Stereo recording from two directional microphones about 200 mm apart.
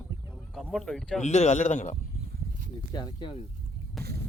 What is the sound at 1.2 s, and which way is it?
Speech, 35° left (ahead or behind).